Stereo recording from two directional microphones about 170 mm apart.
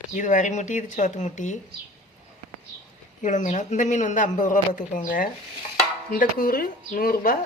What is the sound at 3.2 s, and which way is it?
Speech, 45° left (ahead or behind).